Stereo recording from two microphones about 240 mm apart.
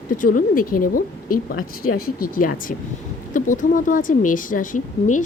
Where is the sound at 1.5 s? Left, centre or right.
Left.